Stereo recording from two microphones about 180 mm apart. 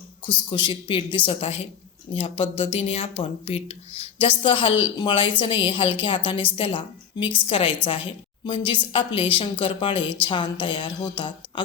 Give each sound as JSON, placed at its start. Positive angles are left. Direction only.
{"t": 0.3, "sound": "a woman's voice", "side_deg": 25}